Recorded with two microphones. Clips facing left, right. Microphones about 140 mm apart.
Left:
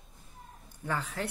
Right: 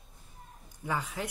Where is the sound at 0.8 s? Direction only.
10° right (ahead or behind).